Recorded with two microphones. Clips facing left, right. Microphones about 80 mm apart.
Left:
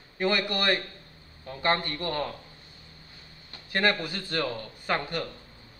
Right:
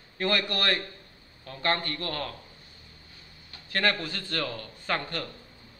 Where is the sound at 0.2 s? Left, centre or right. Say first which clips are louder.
Left 1 dB; centre.